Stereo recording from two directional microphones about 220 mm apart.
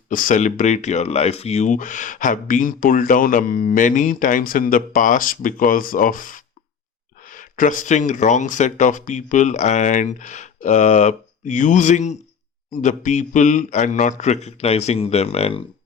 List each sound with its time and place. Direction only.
0.1 s speech: 35° left (ahead or behind)